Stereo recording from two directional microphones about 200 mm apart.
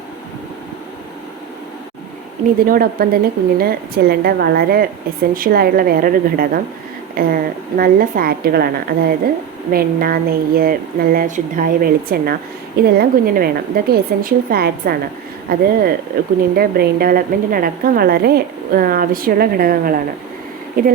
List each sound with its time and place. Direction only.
2.6 s a woman's voice: 45° right (ahead or behind)